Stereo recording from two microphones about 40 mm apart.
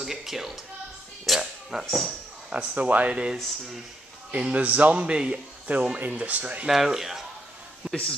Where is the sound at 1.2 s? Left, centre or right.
Centre.